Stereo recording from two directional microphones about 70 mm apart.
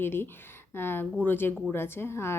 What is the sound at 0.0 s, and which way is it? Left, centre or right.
A woman's voice, left.